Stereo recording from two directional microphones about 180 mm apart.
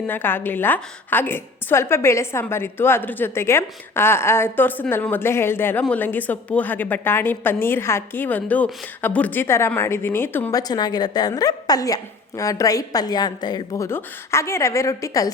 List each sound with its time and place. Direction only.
0.1 s a woman's voice: 10° left (ahead or behind)